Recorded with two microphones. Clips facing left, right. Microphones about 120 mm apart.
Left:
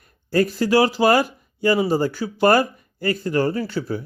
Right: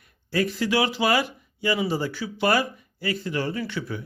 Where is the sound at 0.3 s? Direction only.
40° left (ahead or behind).